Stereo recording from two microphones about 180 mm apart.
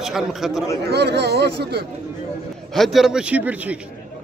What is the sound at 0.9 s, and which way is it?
Speech, 65° right (ahead or behind).